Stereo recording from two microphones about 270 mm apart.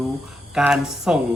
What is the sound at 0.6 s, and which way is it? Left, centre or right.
Speech, centre.